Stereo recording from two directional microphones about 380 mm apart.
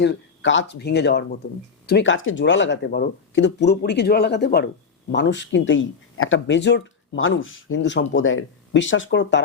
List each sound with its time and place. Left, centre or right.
0.0 s speech: left